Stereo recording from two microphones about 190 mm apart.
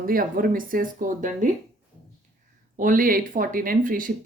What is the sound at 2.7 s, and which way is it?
Speech, 45° right (ahead or behind).